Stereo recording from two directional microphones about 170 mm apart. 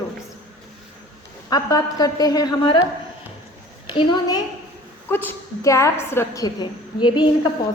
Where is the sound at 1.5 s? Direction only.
20° left (ahead or behind).